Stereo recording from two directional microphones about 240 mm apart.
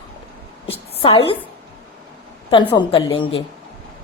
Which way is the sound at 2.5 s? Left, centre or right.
Centre.